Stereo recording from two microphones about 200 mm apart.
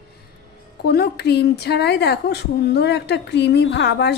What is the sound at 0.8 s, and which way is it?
A woman's voice, 55° left (ahead or behind).